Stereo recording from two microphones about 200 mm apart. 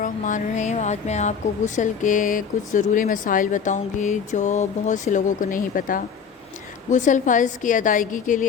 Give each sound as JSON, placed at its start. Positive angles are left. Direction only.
{"t": 0.0, "sound": "speech", "side_deg": 40}